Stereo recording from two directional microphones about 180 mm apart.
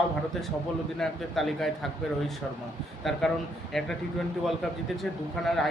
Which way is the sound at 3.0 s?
Centre (ahead or behind).